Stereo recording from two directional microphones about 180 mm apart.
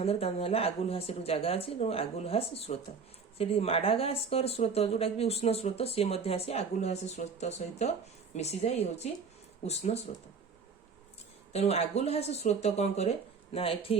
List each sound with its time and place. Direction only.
0.0 s speech: 35° left (ahead or behind)
11.5 s speech: 35° left (ahead or behind)